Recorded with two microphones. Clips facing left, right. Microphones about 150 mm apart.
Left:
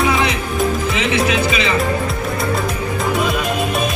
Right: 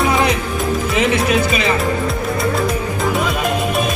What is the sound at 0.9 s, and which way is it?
Speech, 50° right (ahead or behind).